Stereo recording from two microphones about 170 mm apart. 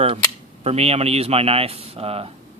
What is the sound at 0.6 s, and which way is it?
Speech, 40° right (ahead or behind).